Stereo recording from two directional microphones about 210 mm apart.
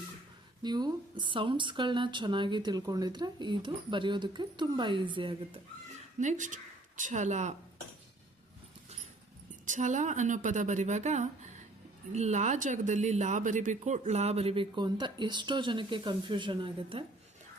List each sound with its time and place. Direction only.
0.6 s speech: 20° right (ahead or behind)
6.1 s speech: 35° right (ahead or behind)
9.6 s speech: 35° right (ahead or behind)